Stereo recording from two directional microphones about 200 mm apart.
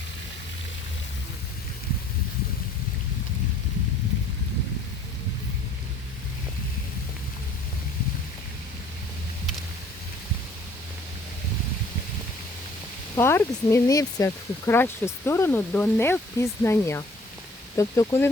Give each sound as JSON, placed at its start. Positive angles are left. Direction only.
{"t": 13.1, "sound": "speech", "side_deg": 10}